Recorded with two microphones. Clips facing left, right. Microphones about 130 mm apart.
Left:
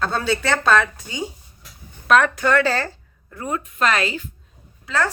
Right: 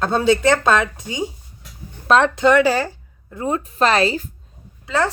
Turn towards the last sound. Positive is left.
turn(degrees=-20)  # may be behind; listen again after turning